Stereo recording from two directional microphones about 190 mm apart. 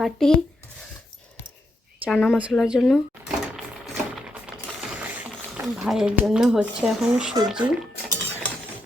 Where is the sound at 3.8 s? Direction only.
5° right (ahead or behind).